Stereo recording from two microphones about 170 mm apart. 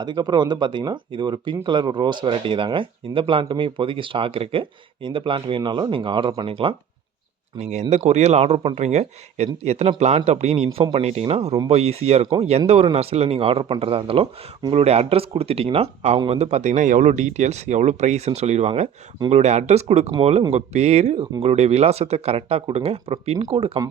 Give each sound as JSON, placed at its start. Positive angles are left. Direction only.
{"t": 0.0, "sound": "speech", "side_deg": -25}
{"t": 7.6, "sound": "speech", "side_deg": -40}